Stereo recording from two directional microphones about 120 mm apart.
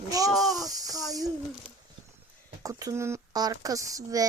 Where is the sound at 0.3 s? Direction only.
Centre (ahead or behind).